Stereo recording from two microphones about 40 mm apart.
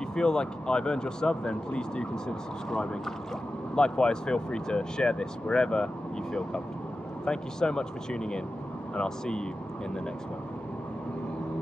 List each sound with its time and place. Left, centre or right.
0.1 s speech: centre
7.2 s speech: centre